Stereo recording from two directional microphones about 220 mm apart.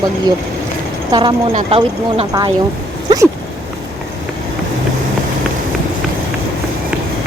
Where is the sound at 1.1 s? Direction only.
20° right (ahead or behind).